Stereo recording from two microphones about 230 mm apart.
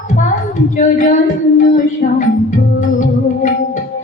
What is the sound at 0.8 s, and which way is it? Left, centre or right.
Female singing, left.